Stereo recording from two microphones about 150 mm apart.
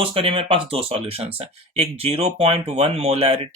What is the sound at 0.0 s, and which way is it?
Speech, 35° right (ahead or behind).